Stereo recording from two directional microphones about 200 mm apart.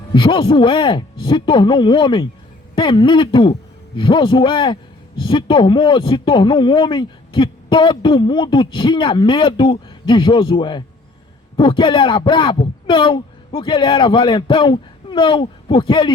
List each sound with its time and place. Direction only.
0.1 s a man's voice: 25° left (ahead or behind)